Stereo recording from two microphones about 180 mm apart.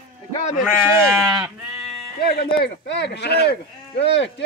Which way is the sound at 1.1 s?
Centre (ahead or behind).